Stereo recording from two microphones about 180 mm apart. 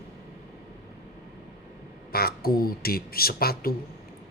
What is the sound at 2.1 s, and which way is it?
Speech, 55° left (ahead or behind).